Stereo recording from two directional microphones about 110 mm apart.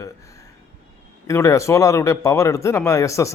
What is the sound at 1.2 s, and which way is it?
Speech, 30° left (ahead or behind).